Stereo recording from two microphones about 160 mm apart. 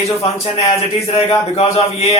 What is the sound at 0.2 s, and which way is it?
Speech, 40° left (ahead or behind).